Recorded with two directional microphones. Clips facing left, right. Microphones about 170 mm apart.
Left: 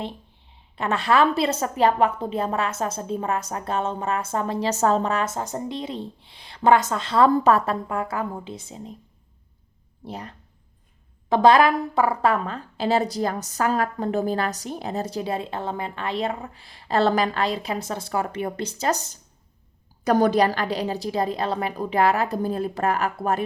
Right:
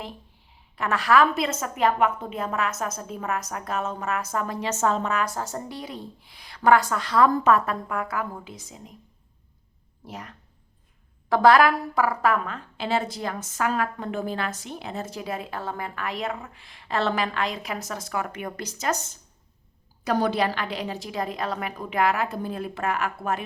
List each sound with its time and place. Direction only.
0.8 s a woman's voice: 25° left (ahead or behind)
10.0 s a woman's voice: 30° left (ahead or behind)
11.3 s a woman's voice: 20° left (ahead or behind)
20.1 s a woman's voice: 45° left (ahead or behind)